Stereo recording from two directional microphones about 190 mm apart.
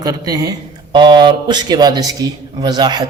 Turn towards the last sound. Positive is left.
turn(degrees=-20)  # may be behind; listen again after turning